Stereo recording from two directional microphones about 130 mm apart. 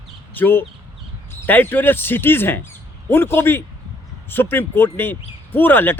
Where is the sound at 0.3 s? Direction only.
15° left (ahead or behind).